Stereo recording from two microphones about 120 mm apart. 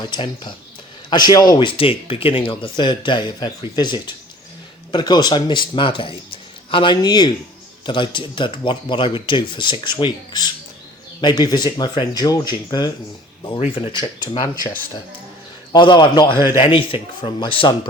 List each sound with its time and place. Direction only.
0.0 s speech: 40° left (ahead or behind)
1.5 s speech: 45° left (ahead or behind)
13.6 s speech: 55° left (ahead or behind)
13.9 s speech: 40° left (ahead or behind)
15.7 s speech: 40° left (ahead or behind)